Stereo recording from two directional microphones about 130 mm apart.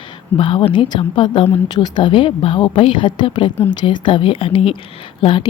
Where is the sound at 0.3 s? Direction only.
40° left (ahead or behind).